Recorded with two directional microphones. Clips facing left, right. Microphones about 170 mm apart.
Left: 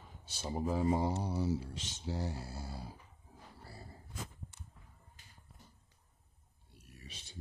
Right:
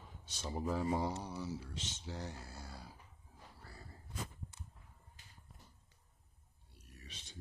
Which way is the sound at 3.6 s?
30° left (ahead or behind).